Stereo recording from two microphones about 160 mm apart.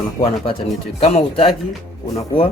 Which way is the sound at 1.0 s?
35° left (ahead or behind).